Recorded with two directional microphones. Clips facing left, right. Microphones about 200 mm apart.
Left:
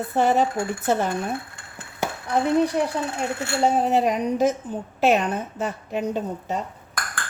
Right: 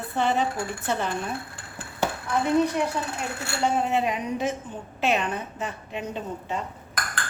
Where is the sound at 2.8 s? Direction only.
35° left (ahead or behind).